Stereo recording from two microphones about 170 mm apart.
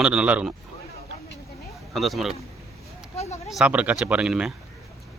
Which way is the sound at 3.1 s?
40° left (ahead or behind).